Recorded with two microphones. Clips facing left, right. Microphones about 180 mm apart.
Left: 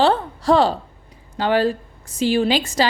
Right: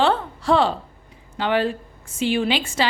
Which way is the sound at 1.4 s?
40° left (ahead or behind).